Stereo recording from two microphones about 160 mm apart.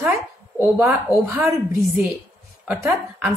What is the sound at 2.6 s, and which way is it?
Speech, 15° right (ahead or behind).